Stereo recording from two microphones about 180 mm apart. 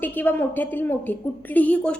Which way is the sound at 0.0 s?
10° left (ahead or behind).